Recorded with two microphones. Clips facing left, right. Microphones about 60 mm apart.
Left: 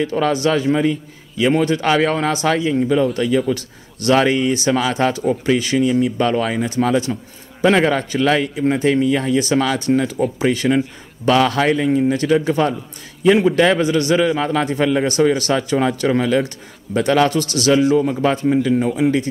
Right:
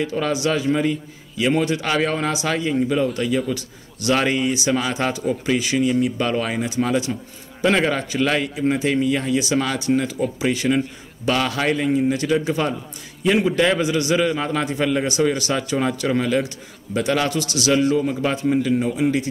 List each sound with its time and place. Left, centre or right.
0.0 s speech: left